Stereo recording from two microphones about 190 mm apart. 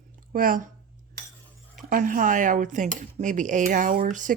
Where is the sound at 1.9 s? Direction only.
45° right (ahead or behind).